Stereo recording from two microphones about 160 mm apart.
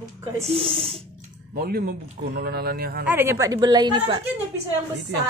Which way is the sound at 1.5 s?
70° right (ahead or behind).